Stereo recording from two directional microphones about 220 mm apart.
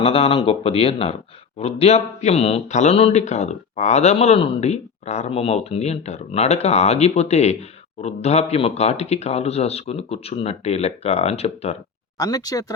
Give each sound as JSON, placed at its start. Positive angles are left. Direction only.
{"t": 0.0, "sound": "speech", "side_deg": 25}
{"t": 12.1, "sound": "speech", "side_deg": 15}